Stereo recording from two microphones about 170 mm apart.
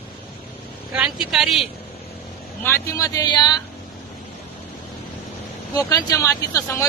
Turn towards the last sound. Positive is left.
turn(degrees=20)  # may be behind; listen again after turning